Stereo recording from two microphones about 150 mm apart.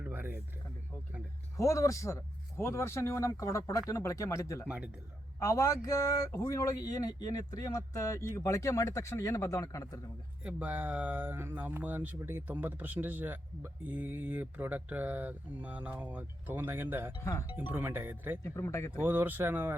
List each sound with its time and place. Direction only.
0.0 s a sound: 15° right (ahead or behind)
1.5 s speech: 20° left (ahead or behind)
10.4 s speech: 10° right (ahead or behind)
17.2 s speech: 25° left (ahead or behind)
17.7 s speech: 15° right (ahead or behind)
18.4 s speech: 20° left (ahead or behind)
18.9 s speech: 15° right (ahead or behind)